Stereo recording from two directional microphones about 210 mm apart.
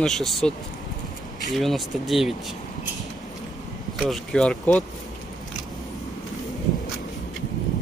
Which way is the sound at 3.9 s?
Centre (ahead or behind).